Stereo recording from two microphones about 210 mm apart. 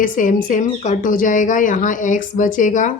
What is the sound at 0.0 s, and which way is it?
Speech, 40° left (ahead or behind).